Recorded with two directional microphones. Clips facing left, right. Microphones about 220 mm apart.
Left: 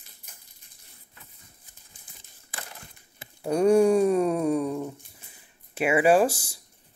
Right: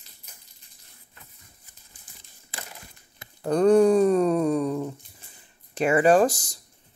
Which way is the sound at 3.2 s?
10° left (ahead or behind).